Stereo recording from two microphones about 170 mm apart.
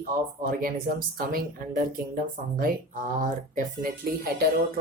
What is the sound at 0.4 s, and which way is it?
Speech, 55° right (ahead or behind).